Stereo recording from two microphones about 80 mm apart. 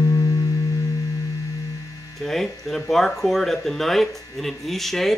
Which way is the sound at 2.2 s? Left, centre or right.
Centre.